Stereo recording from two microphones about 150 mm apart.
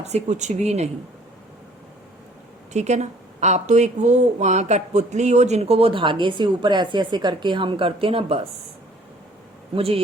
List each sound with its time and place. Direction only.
0.0 s speech: 50° right (ahead or behind)
2.7 s speech: 50° right (ahead or behind)
9.7 s speech: 40° right (ahead or behind)